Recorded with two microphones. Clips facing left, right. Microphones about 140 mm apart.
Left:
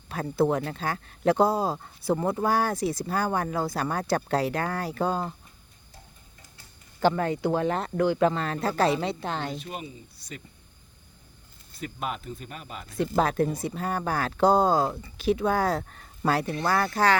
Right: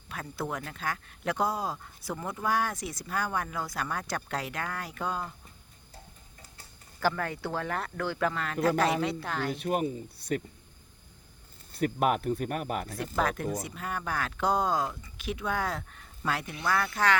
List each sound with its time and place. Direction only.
0.1 s speech: 30° left (ahead or behind)
7.0 s speech: 20° left (ahead or behind)
9.6 s speech: 50° right (ahead or behind)
11.7 s speech: 60° right (ahead or behind)
13.0 s speech: 30° left (ahead or behind)